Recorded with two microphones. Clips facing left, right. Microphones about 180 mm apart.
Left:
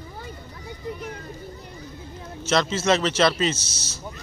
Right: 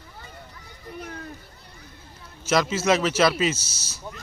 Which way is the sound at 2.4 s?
10° right (ahead or behind).